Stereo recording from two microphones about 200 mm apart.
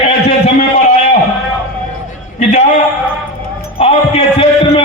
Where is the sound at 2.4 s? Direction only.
35° left (ahead or behind).